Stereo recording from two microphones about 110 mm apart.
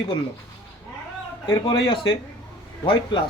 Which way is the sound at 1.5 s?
35° left (ahead or behind).